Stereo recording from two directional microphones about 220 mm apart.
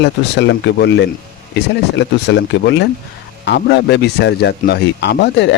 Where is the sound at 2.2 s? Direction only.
50° left (ahead or behind).